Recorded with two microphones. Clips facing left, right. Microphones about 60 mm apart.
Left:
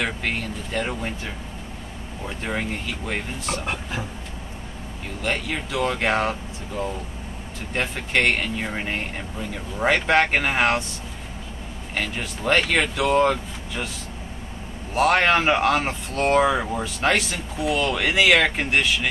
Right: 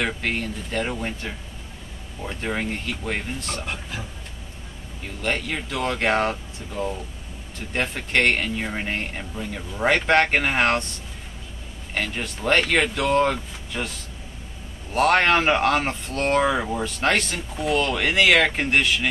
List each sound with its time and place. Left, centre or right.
0.0 s speech: centre
3.6 s speech: left
5.2 s speech: centre
15.0 s speech: centre